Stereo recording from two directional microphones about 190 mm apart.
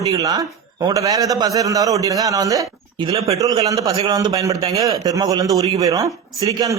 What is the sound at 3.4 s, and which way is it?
A man's voice, 20° right (ahead or behind).